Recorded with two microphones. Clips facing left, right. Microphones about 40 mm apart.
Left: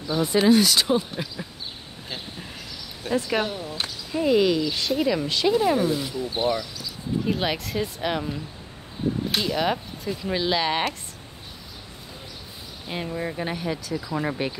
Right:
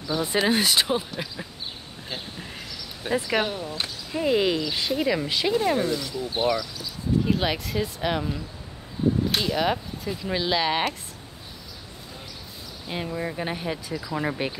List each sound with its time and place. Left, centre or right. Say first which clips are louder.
0.4 s speech: left 4 dB; right
1.2 s speech: left 1 dB; centre
3.1 s speech: even; centre
5.9 s speech: left 2 dB; left
6.4 s speech: even; centre
7.2 s speech: right 1 dB; centre
12.8 s speech: even; centre
14.0 s speech: even; centre